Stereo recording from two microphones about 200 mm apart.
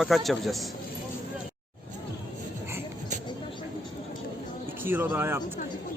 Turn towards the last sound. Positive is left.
turn(degrees=-10)  # may be behind; listen again after turning